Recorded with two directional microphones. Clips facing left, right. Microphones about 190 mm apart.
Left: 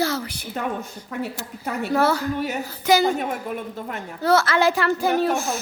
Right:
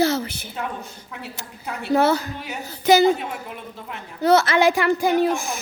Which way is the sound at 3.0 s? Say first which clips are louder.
Right 3 dB; 50° left (ahead or behind).